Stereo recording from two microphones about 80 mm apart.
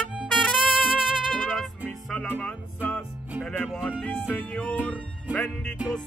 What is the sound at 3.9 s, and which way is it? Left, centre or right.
Music, centre.